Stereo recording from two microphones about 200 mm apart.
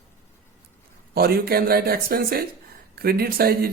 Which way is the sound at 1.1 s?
50° right (ahead or behind).